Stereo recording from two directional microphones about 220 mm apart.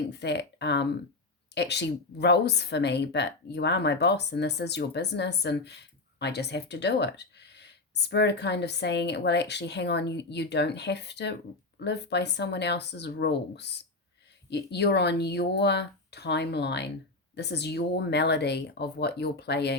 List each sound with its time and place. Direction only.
0.1 s speech: 50° left (ahead or behind)